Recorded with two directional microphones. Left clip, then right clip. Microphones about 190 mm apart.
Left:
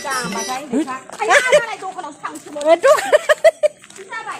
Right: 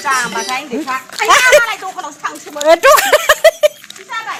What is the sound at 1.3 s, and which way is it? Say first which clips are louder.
Speech: right 5 dB; 15° right (ahead or behind).